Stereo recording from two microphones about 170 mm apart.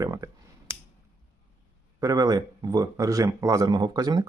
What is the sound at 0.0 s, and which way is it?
Speech, 20° right (ahead or behind).